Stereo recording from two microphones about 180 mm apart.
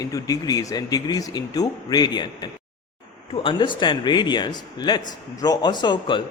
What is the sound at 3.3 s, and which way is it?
A man's voice, 30° left (ahead or behind).